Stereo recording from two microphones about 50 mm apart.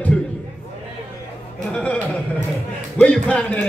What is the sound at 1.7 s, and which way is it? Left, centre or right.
Speech, left.